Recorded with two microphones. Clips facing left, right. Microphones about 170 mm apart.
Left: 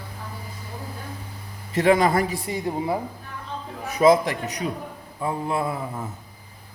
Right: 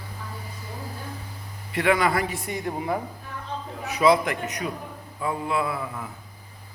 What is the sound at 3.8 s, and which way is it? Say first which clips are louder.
A man's voice: left 3 dB; 45° left (ahead or behind).